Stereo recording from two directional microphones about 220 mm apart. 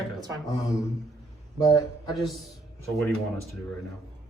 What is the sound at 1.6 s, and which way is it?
Speech, 15° left (ahead or behind).